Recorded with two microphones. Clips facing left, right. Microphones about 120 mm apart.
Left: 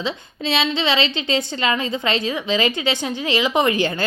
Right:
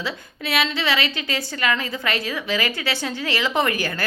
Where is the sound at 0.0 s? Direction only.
25° left (ahead or behind).